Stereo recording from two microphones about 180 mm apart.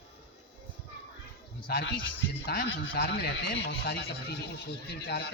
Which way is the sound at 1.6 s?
60° left (ahead or behind).